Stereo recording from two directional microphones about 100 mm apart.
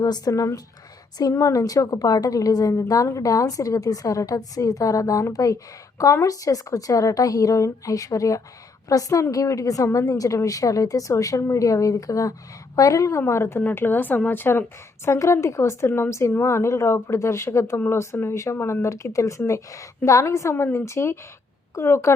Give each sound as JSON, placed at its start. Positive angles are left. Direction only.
{"t": 0.0, "sound": "a woman's voice", "side_deg": 40}